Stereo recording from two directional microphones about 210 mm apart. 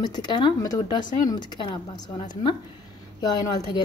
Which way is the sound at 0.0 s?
20° left (ahead or behind).